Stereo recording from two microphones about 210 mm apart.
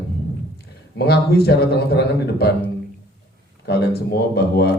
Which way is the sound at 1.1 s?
50° left (ahead or behind).